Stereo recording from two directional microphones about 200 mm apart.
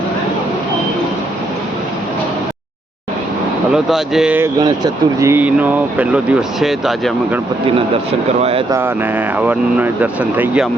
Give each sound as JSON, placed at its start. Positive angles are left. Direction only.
{"t": 3.7, "sound": "speech", "side_deg": 0}
{"t": 4.6, "sound": "speech", "side_deg": -15}
{"t": 8.4, "sound": "speech", "side_deg": -30}
{"t": 8.7, "sound": "speech", "side_deg": -10}